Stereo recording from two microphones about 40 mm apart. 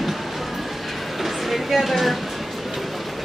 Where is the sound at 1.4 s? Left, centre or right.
Centre.